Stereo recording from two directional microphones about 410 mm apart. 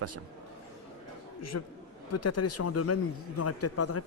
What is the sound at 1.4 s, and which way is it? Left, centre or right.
A man's voice, left.